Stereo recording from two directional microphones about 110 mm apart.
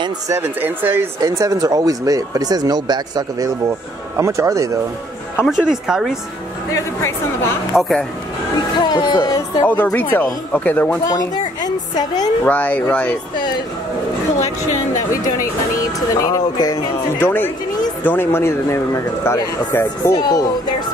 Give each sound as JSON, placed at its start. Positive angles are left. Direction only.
{"t": 0.3, "sound": "speech", "side_deg": -20}
{"t": 1.2, "sound": "speech", "side_deg": -30}
{"t": 5.5, "sound": "a woman's voice", "side_deg": -5}
{"t": 6.7, "sound": "speech", "side_deg": 25}
{"t": 7.7, "sound": "a woman's voice", "side_deg": -5}
{"t": 8.7, "sound": "music", "side_deg": 40}
{"t": 9.7, "sound": "speech", "side_deg": 15}
{"t": 11.1, "sound": "a sound", "side_deg": 40}
{"t": 12.4, "sound": "speech", "side_deg": 15}
{"t": 16.2, "sound": "speech", "side_deg": 35}
{"t": 17.2, "sound": "speech", "side_deg": 20}